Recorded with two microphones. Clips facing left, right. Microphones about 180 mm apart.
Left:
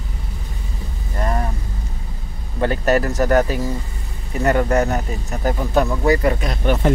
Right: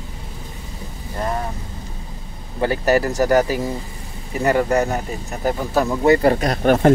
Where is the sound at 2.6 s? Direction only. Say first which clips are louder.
Even; 10° right (ahead or behind).